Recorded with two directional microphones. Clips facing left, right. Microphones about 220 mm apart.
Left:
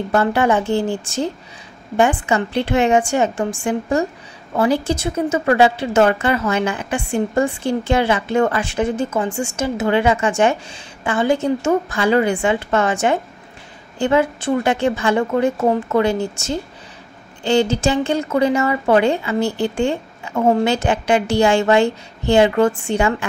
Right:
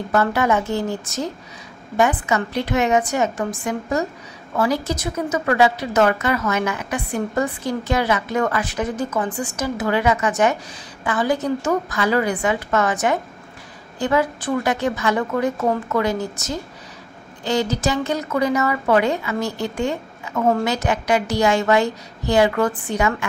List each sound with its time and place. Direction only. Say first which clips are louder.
0.1 s a woman's voice: left 2 dB; 30° left (ahead or behind)